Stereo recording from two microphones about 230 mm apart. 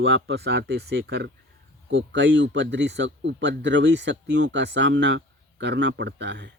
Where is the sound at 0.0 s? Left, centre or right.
Right.